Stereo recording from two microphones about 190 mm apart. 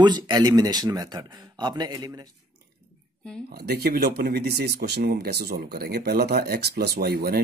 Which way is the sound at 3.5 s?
55° right (ahead or behind).